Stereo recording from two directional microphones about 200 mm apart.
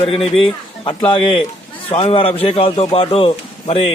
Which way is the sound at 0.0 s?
30° left (ahead or behind).